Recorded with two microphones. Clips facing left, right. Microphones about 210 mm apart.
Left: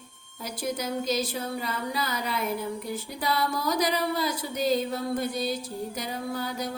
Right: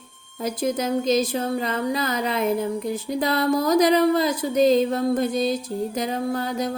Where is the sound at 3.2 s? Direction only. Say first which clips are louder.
Right 6 dB; 45° right (ahead or behind).